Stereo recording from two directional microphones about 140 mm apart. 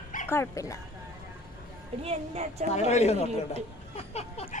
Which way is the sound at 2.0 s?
50° right (ahead or behind).